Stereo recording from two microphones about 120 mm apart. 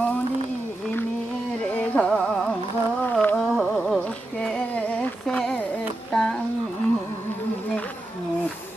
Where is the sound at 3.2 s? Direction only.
5° left (ahead or behind).